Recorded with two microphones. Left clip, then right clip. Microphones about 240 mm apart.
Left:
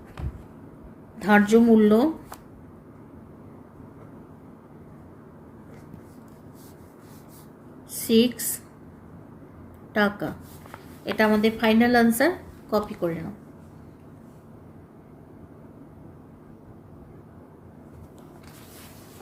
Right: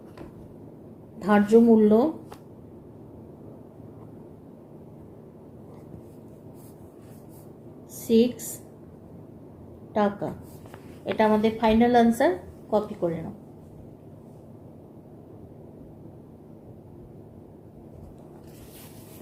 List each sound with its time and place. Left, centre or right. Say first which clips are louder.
1.2 s a woman's voice: even; left
8.0 s a woman's voice: even; left
9.9 s a woman's voice: left 1 dB; left